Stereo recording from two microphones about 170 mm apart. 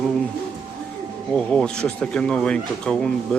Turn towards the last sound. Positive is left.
turn(degrees=5)  # may be behind; listen again after turning